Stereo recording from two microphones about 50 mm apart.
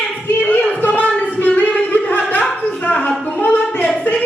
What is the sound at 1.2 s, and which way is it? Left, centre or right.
Singing, left.